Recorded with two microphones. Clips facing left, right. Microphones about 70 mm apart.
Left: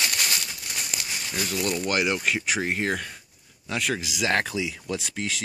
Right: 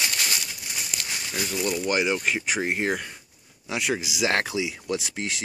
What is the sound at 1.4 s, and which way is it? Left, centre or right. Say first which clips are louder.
Speech: even; centre.